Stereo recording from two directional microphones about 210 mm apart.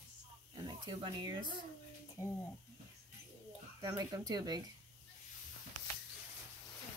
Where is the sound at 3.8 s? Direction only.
15° right (ahead or behind).